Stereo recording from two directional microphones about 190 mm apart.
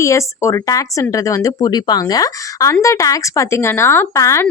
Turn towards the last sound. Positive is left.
turn(degrees=15)  # may be behind; listen again after turning